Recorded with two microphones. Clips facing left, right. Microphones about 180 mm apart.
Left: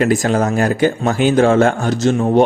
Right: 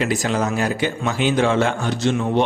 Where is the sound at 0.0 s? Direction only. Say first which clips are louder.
Left 6 dB; 50° left (ahead or behind).